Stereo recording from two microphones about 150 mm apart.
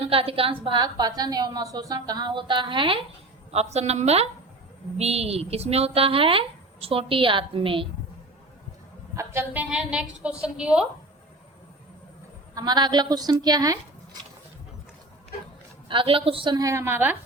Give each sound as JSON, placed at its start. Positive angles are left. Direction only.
{"t": 0.0, "sound": "a woman's voice", "side_deg": -40}
{"t": 3.5, "sound": "a woman's voice", "side_deg": -45}
{"t": 9.1, "sound": "a woman's voice", "side_deg": -15}
{"t": 12.5, "sound": "a woman's voice", "side_deg": -30}
{"t": 15.9, "sound": "speech", "side_deg": -35}